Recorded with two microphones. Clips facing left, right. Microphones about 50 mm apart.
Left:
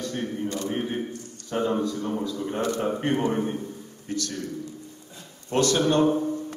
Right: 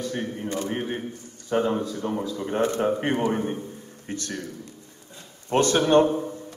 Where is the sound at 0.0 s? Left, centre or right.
Centre.